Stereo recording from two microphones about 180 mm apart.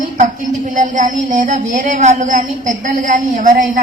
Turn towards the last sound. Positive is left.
turn(degrees=-45)  # may be behind; listen again after turning